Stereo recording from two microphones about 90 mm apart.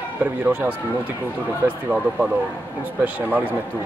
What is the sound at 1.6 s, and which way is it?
Speech, 20° right (ahead or behind).